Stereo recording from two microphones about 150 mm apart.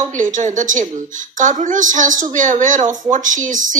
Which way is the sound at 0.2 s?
55° right (ahead or behind).